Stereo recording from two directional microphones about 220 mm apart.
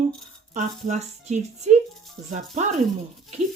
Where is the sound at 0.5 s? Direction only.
30° right (ahead or behind).